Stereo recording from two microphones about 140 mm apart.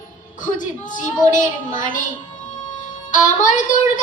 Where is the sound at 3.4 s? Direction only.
65° left (ahead or behind).